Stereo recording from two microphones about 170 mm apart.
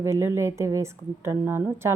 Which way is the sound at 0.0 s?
15° right (ahead or behind).